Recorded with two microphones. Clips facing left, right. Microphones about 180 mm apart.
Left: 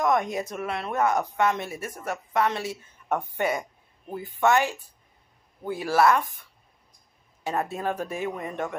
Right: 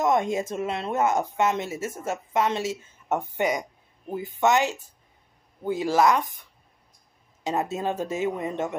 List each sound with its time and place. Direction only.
0.0 s speech: 25° right (ahead or behind)
7.7 s speech: 20° right (ahead or behind)